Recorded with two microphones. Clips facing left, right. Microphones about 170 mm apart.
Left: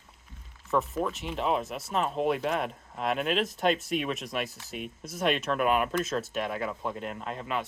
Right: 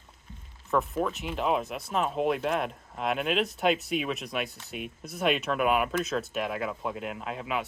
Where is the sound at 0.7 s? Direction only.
Centre (ahead or behind).